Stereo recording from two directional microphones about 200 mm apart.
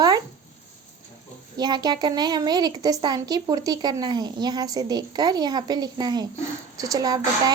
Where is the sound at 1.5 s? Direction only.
20° right (ahead or behind).